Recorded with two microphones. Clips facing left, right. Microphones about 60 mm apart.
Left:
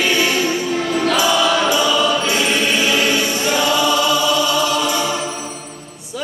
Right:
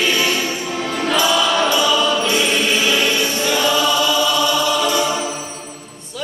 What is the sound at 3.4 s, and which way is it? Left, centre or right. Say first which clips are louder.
Choir: even; centre.